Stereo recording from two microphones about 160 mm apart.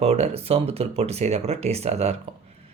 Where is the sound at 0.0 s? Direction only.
40° right (ahead or behind).